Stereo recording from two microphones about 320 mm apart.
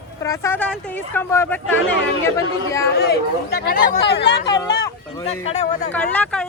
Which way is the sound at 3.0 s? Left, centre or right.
Left.